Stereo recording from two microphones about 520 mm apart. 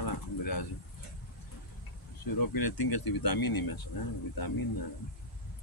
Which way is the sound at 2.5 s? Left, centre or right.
Left.